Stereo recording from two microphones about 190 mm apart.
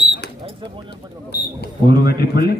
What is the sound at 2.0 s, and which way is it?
Speech, 55° left (ahead or behind).